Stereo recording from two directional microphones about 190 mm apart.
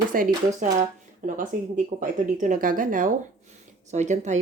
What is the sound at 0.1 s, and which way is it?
A woman's voice, 45° right (ahead or behind).